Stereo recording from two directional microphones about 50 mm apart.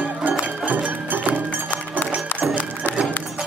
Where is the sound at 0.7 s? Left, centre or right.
Right.